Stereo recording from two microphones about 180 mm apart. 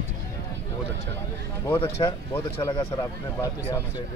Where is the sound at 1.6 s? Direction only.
15° left (ahead or behind).